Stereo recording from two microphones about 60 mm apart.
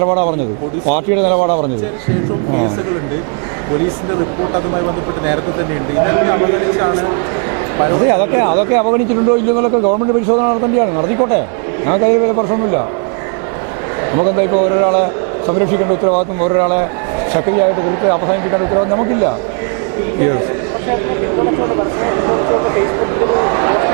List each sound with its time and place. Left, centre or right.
0.0 s a man's voice: right
1.1 s a man's voice: right
1.4 s a man's voice: right
4.5 s a man's voice: right
9.7 s a man's voice: right
14.1 s a man's voice: right
20.9 s speech: right